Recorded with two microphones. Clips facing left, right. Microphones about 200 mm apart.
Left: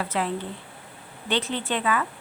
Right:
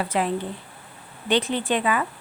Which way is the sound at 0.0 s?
15° right (ahead or behind).